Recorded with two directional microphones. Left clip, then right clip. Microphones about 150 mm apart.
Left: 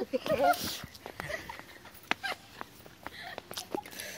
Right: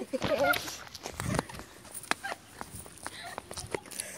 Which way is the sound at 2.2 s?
30° right (ahead or behind).